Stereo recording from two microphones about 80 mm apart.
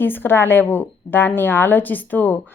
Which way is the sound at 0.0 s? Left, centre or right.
Left.